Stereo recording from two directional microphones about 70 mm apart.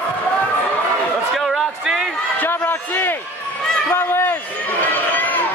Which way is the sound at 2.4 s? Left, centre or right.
Left.